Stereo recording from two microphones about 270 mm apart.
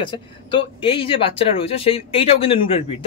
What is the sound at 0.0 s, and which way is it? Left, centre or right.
Speech, centre.